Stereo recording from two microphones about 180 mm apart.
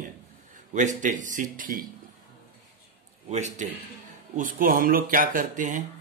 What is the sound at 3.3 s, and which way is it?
A man's voice, 40° right (ahead or behind).